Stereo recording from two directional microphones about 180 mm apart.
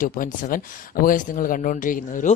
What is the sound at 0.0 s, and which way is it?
Speech, 50° left (ahead or behind).